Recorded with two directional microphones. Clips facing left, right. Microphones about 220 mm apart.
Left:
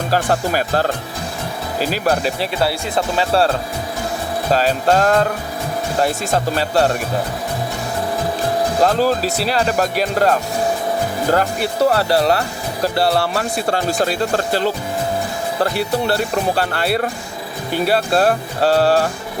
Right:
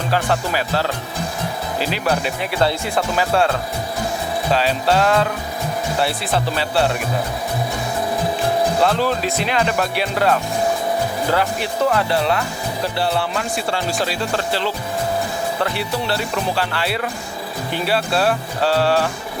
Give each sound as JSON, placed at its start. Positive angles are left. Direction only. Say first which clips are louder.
{"t": 0.1, "sound": "speech", "louder": "left 2 dB", "side_deg": 45}
{"t": 4.5, "sound": "speech", "louder": "left 3 dB", "side_deg": 45}
{"t": 8.8, "sound": "speech", "louder": "left 3 dB", "side_deg": 40}